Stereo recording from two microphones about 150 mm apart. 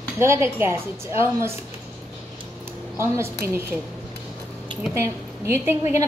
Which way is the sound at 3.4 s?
85° right.